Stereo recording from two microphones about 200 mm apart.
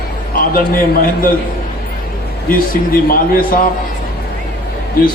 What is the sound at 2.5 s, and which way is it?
A man's voice, 45° left (ahead or behind).